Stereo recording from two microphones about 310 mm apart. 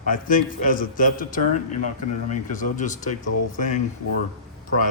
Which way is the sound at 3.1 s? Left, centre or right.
Left.